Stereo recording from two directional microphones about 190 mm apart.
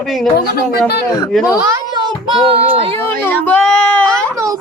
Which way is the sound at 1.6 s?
20° right (ahead or behind).